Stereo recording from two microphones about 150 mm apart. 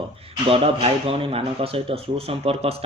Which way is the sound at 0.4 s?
40° right (ahead or behind).